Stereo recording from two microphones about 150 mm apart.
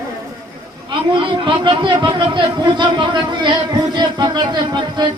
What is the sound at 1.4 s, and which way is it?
Speech, 30° right (ahead or behind).